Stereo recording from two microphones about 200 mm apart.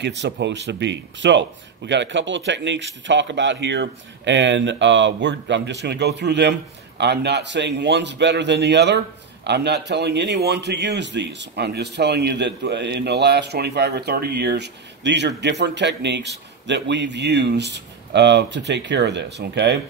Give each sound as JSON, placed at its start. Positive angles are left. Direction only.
{"t": 0.0, "sound": "a man's voice", "side_deg": -60}